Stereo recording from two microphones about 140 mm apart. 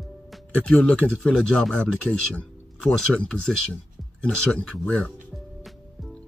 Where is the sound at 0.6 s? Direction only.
5° left (ahead or behind).